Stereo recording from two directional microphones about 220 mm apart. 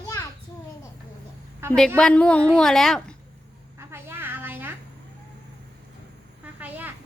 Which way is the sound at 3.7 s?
10° right (ahead or behind).